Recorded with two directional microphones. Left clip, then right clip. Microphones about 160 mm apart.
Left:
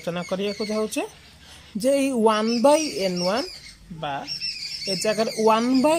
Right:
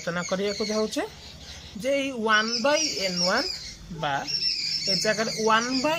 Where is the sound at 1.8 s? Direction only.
35° left (ahead or behind).